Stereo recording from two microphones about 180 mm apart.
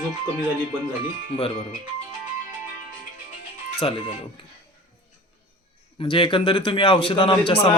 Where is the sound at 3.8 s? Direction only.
30° left (ahead or behind).